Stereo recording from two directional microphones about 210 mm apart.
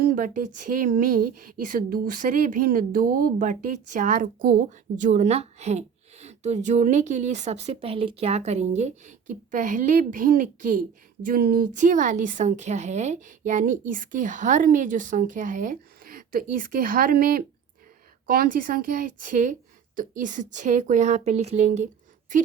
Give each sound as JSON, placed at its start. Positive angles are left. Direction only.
{"t": 0.0, "sound": "speech", "side_deg": -40}